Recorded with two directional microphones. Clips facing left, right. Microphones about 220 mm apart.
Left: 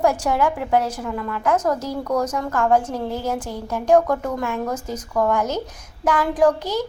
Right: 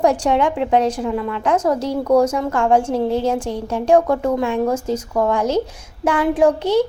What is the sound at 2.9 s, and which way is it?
Speech, 75° right (ahead or behind).